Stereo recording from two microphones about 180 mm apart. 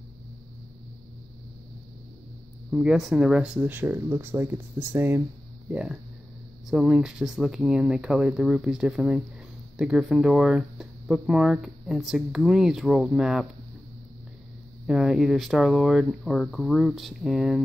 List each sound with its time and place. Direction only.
2.7 s speech: 5° right (ahead or behind)
14.9 s speech: centre (ahead or behind)